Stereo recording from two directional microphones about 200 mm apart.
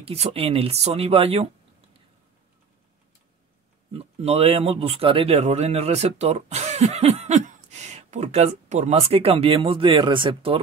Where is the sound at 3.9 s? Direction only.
30° right (ahead or behind).